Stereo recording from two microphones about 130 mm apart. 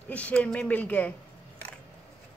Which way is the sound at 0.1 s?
10° left (ahead or behind).